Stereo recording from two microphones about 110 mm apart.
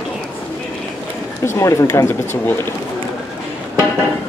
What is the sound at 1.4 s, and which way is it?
Speech, 25° left (ahead or behind).